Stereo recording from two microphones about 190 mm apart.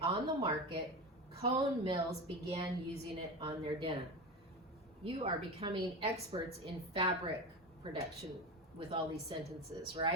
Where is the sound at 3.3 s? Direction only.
25° right (ahead or behind).